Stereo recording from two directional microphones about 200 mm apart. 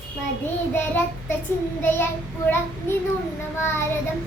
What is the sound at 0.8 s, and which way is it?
Child singing, 10° left (ahead or behind).